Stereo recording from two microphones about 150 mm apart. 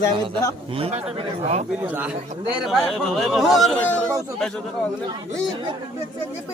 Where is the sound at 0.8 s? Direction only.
45° right (ahead or behind).